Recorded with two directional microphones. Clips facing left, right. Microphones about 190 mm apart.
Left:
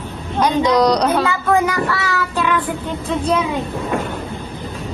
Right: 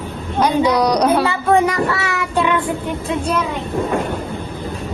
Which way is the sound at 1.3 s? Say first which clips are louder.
Right 2 dB; 30° right (ahead or behind).